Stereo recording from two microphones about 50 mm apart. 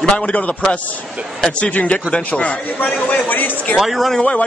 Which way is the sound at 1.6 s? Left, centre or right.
Left.